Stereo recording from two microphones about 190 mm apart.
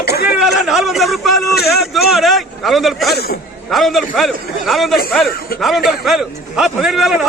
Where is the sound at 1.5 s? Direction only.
55° left (ahead or behind).